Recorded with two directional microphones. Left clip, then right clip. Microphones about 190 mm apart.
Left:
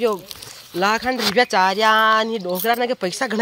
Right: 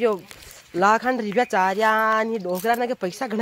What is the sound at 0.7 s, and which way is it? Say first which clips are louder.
Speech: right 1 dB; 15° right (ahead or behind).